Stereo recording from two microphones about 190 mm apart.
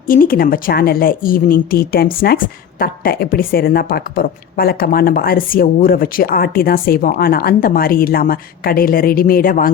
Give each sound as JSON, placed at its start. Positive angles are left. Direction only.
{"t": 0.1, "sound": "a woman's voice", "side_deg": 50}